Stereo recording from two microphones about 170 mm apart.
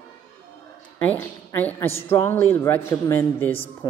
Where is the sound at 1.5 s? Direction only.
15° left (ahead or behind).